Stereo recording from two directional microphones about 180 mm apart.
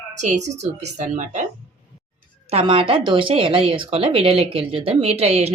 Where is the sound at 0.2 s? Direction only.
40° right (ahead or behind).